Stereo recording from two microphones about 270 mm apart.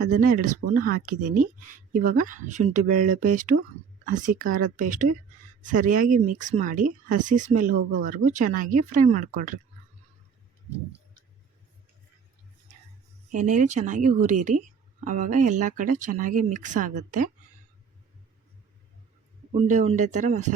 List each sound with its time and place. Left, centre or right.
0.0 s speech: right
13.3 s speech: right
19.5 s speech: right